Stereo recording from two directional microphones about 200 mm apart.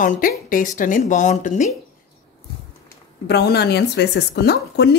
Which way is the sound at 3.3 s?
55° left (ahead or behind).